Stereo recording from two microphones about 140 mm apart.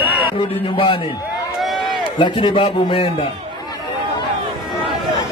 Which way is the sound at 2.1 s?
35° left (ahead or behind).